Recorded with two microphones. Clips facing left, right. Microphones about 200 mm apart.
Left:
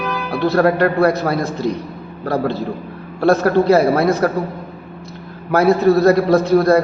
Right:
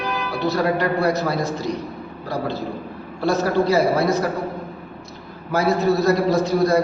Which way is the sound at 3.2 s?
60° left (ahead or behind).